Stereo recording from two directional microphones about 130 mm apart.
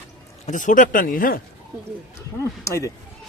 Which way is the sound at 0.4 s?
80° left.